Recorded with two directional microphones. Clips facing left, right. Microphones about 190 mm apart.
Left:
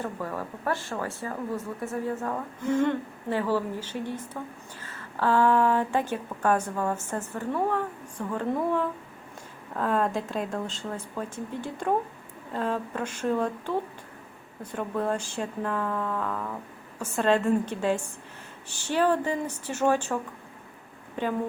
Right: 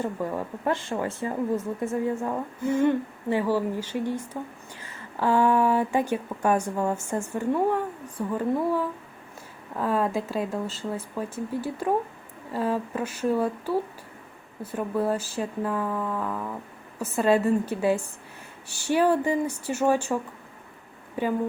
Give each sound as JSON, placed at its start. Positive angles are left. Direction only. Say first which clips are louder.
{"t": 0.0, "sound": "a woman's voice", "louder": "right 4 dB", "side_deg": -15}
{"t": 21.2, "sound": "a woman's voice", "louder": "right 2 dB", "side_deg": -10}